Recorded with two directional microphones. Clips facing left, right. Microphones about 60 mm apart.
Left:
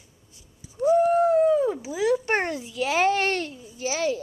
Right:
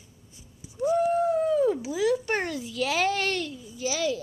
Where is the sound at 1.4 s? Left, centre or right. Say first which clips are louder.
Left 3 dB; left.